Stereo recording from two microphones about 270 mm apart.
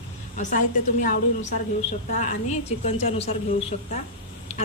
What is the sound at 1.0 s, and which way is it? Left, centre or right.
A woman's voice, left.